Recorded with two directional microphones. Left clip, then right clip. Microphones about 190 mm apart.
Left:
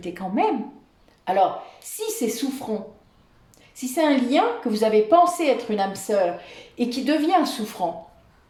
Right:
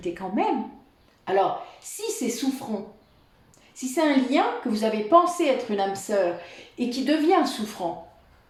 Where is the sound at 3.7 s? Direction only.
45° left (ahead or behind).